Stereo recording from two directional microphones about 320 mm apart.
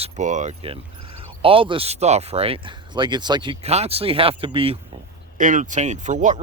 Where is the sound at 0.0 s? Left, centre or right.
Right.